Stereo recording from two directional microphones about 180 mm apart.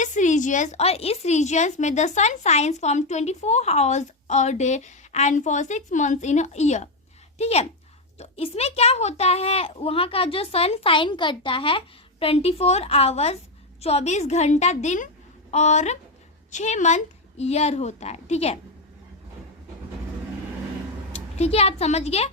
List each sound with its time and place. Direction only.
0.0 s a woman's voice: 40° left (ahead or behind)
21.1 s a woman's voice: 35° left (ahead or behind)